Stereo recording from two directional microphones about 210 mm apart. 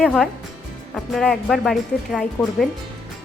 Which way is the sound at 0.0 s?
5° left (ahead or behind).